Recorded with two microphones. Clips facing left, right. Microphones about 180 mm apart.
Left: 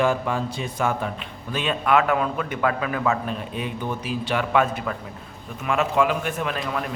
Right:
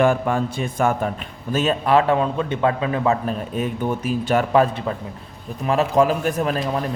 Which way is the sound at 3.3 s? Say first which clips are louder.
Right 5 dB; 45° right (ahead or behind).